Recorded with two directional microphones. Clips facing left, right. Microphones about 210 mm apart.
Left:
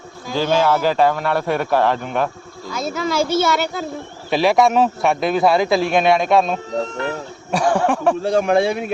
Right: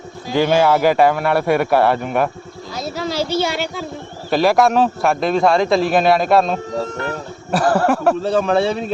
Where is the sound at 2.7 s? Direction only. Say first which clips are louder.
Left 2 dB; 50° left (ahead or behind).